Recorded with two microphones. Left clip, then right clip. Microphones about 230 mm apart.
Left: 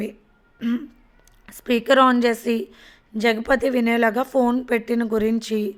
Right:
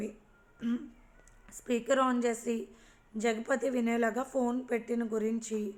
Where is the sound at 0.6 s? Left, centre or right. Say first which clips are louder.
Left 10 dB; left.